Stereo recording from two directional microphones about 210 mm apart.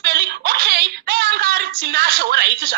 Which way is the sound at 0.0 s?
50° right (ahead or behind).